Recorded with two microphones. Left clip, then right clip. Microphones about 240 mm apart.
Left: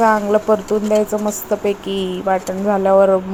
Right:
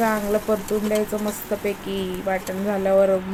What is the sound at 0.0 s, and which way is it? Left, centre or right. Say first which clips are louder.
Speech: left 8 dB; centre.